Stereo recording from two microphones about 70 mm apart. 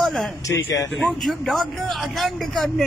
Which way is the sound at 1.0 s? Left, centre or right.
Centre.